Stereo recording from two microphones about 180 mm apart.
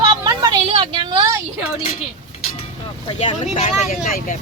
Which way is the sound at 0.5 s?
30° right (ahead or behind).